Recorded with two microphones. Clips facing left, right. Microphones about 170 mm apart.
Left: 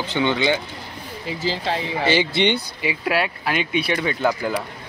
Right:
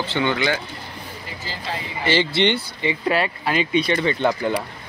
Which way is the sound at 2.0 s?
15° left (ahead or behind).